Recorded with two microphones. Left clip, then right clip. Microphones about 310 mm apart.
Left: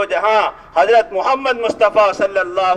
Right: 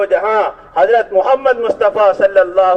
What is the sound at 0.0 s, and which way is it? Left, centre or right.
A man's voice, left.